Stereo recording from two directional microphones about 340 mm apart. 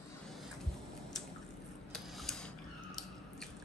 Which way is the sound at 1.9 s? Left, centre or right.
Centre.